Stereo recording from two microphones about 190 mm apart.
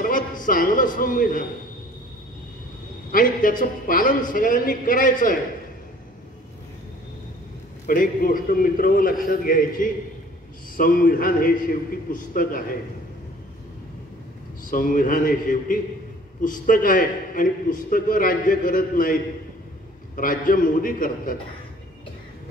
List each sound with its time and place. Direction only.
0.0 s a man's voice: 45° left (ahead or behind)
3.1 s a man's voice: 45° left (ahead or behind)
7.8 s a man's voice: 45° left (ahead or behind)
14.7 s a man's voice: 45° left (ahead or behind)
20.2 s a man's voice: 45° left (ahead or behind)